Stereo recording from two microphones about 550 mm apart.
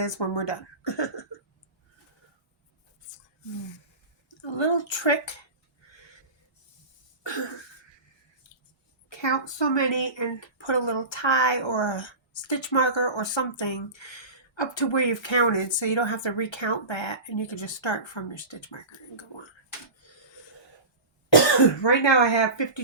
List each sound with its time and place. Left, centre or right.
0.0 s speech: left
4.3 s speech: left
7.2 s cough: left
8.4 s a sound: left
9.0 s speech: left
21.8 s speech: left